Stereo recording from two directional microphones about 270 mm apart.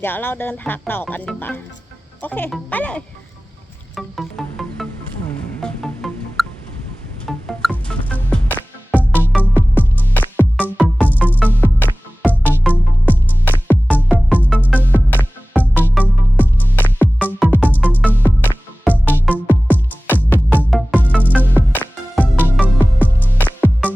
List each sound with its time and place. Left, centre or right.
0.0 s speech: centre
3.9 s music: centre
9.7 s music: centre
22.4 s music: centre
23.4 s music: centre